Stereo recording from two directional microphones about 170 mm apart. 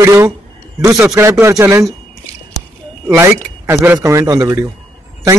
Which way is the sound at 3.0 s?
10° right (ahead or behind).